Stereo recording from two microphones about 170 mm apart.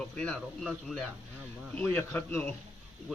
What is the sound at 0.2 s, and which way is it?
Speech, 5° left (ahead or behind).